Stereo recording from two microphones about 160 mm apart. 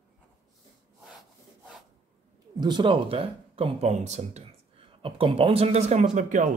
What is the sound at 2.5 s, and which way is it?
Speech, 25° right (ahead or behind).